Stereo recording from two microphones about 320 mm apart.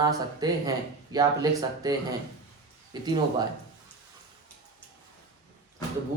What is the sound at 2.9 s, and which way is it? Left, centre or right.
Speech, centre.